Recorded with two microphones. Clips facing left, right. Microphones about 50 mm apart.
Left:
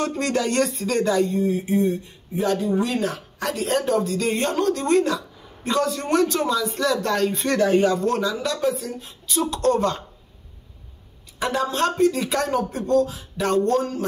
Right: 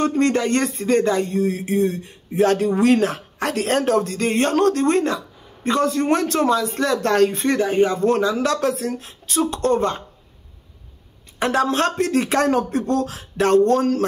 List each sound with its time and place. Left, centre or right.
0.1 s a man's voice: right
1.2 s speech: right
3.1 s a sound: right
3.5 s speech: right
4.8 s a man's voice: right
7.4 s speech: centre
7.9 s a man's voice: right
8.4 s speech: right
9.3 s a man's voice: right
11.3 s a woman's voice: right